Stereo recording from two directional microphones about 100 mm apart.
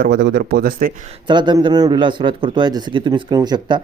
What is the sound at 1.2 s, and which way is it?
A man's voice, 50° right (ahead or behind).